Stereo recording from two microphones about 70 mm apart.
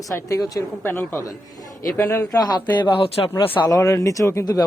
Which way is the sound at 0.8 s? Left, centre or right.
Left.